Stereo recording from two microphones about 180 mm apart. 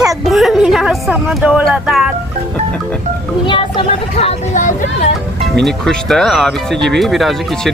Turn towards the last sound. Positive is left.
turn(degrees=0)  # may be behind; listen again after turning